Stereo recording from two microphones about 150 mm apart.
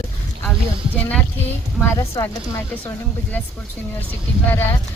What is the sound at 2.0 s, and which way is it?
Speech, 20° left (ahead or behind).